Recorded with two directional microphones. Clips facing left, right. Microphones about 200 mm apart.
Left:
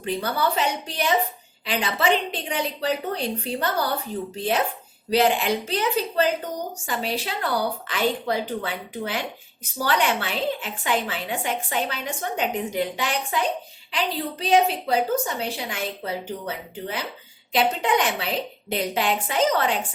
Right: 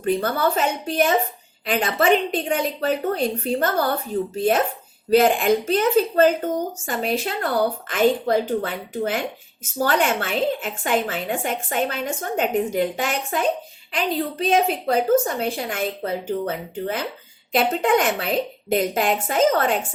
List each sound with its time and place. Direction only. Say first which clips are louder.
0.0 s speech: right 4 dB; 50° right (ahead or behind)
5.1 s speech: right 4 dB; 50° right (ahead or behind)